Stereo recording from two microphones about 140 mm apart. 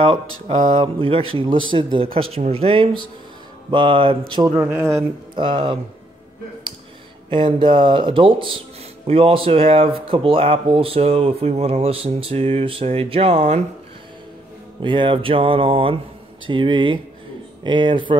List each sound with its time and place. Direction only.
0.0 s speech: 40° right (ahead or behind)
4.6 s speech: 15° right (ahead or behind)
5.3 s speech: 35° right (ahead or behind)
7.2 s speech: 35° right (ahead or behind)
14.8 s speech: 35° right (ahead or behind)